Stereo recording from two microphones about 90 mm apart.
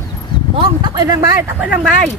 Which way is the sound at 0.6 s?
55° right (ahead or behind).